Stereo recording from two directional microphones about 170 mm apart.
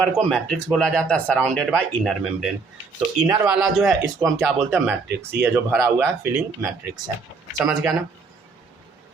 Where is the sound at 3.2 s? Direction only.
5° right (ahead or behind).